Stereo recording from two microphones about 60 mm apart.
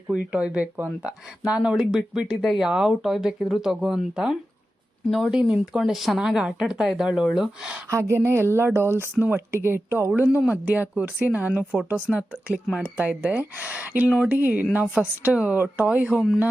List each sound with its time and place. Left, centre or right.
0.1 s speech: centre
1.7 s speech: centre
7.9 s speech: right
10.2 s speech: right
11.7 s speech: centre
12.1 s speech: centre